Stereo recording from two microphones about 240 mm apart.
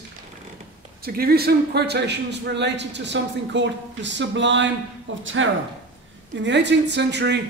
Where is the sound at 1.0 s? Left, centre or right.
Right.